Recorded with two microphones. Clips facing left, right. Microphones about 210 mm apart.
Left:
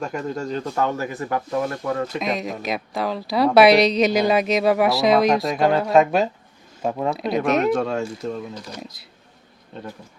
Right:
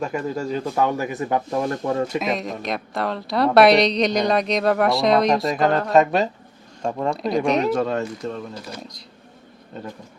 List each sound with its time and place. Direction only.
0.0 s speech: 5° right (ahead or behind); by 2.0 s 25° right (ahead or behind)
2.1 s a woman's voice: centre (ahead or behind)